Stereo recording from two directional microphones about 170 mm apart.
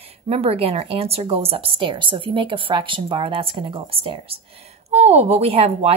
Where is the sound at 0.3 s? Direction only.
35° right (ahead or behind).